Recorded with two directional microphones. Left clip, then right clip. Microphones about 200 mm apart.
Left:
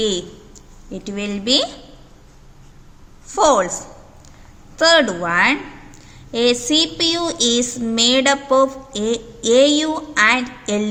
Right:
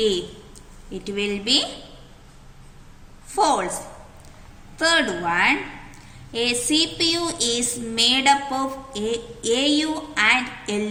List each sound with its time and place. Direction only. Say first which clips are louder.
0.0 s a woman's voice: left 1 dB; 40° left (ahead or behind)
3.2 s a woman's voice: left 5 dB; 40° left (ahead or behind)